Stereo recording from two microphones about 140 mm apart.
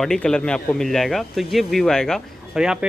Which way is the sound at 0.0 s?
5° left (ahead or behind).